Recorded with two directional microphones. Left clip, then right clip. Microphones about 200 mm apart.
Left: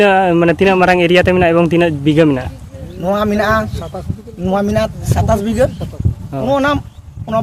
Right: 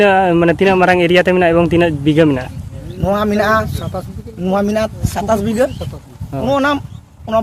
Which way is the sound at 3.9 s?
55° right (ahead or behind).